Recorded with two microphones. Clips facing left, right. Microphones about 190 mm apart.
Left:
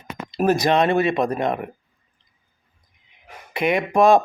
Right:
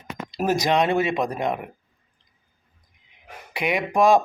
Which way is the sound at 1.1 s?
55° left (ahead or behind).